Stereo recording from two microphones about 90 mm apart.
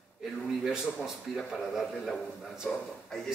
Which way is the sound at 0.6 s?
5° right (ahead or behind).